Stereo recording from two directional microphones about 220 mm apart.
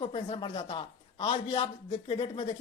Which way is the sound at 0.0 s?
25° left (ahead or behind).